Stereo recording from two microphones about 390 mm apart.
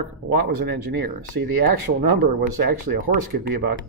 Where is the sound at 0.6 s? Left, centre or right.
Right.